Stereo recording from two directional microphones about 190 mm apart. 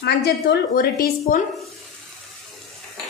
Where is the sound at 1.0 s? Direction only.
45° left (ahead or behind).